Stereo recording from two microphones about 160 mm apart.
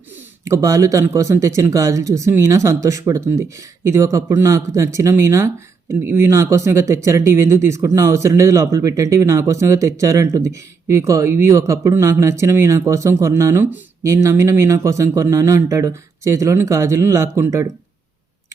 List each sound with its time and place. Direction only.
0.1 s speech: 15° right (ahead or behind)